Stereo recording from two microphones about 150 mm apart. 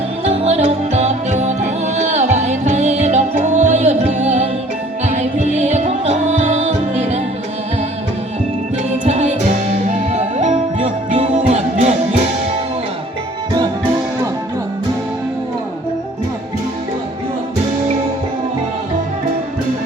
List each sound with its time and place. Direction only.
0.3 s music: 45° right (ahead or behind)
10.1 s music: 50° right (ahead or behind)